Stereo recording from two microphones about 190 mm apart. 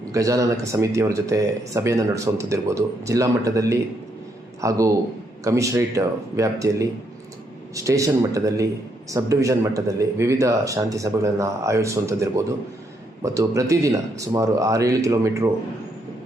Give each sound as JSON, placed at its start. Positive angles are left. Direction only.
{"t": 0.1, "sound": "a man's voice", "side_deg": -15}